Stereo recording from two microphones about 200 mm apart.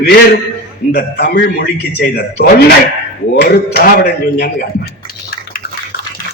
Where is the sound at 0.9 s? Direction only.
50° left (ahead or behind).